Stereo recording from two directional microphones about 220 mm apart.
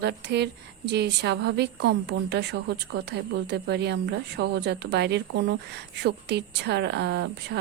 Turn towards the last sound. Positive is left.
turn(degrees=-50)  # may be behind; listen again after turning